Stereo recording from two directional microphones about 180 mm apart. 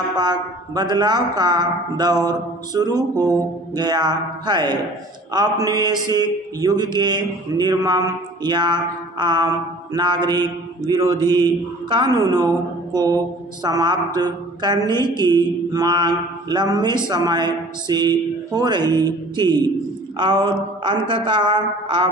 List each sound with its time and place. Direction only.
0.2 s mantra: 25° right (ahead or behind)
18.8 s speech: 15° left (ahead or behind)
19.0 s mantra: 25° right (ahead or behind)